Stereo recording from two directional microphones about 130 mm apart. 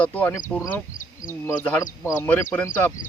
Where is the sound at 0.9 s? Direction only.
90° left.